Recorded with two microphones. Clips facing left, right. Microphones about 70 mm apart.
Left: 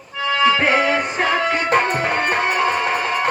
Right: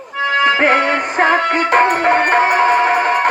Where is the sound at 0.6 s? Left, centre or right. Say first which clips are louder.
Right 3 dB; right.